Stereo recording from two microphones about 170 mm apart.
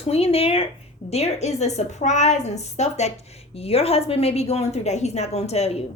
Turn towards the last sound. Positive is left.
turn(degrees=35)  # may be behind; listen again after turning